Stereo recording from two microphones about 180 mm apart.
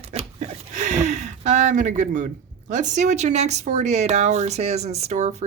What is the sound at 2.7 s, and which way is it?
Speech, 40° right (ahead or behind).